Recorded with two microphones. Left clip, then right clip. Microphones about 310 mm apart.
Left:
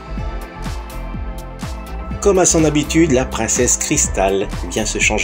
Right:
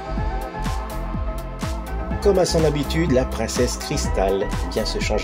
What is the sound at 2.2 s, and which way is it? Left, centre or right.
Speech, right.